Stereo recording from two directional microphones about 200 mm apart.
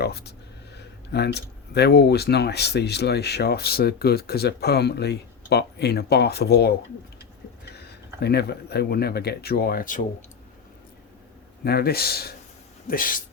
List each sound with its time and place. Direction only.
0.0 s speech: 55° left (ahead or behind)
7.8 s speech: 55° left (ahead or behind)
11.6 s speech: 50° left (ahead or behind)